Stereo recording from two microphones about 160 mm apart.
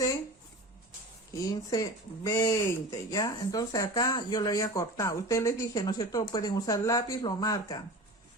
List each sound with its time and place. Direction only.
1.5 s speech: 20° left (ahead or behind)